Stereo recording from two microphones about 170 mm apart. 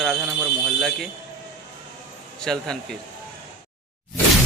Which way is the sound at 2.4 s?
5° left (ahead or behind).